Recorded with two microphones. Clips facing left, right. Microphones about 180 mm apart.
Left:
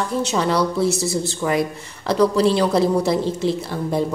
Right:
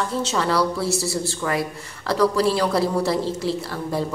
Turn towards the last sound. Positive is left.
turn(degrees=20)  # may be behind; listen again after turning